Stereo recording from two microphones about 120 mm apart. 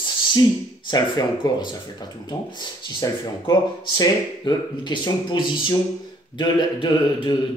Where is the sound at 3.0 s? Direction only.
35° left (ahead or behind).